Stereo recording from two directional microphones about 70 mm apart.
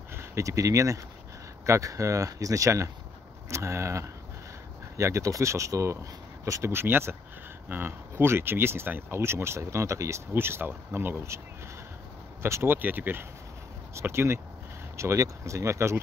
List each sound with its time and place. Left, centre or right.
0.1 s speech: right
6.7 s speech: right
10.3 s speech: right
12.7 s speech: right
13.9 s speech: right